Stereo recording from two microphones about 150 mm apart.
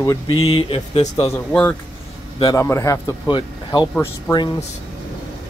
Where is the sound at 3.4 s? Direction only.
30° left (ahead or behind).